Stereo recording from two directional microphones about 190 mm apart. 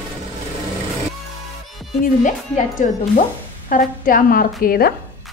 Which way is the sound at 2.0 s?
40° left (ahead or behind).